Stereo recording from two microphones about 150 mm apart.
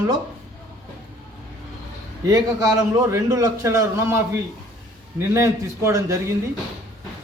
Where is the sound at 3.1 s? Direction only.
20° right (ahead or behind).